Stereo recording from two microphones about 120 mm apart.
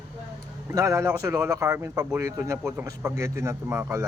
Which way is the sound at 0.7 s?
25° right (ahead or behind).